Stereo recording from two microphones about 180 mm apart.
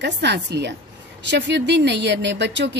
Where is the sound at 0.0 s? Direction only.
70° right (ahead or behind).